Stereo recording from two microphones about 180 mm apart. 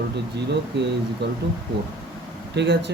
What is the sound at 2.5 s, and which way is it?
Speech, 70° right (ahead or behind).